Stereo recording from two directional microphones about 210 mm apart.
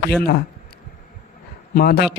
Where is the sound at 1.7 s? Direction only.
50° left (ahead or behind).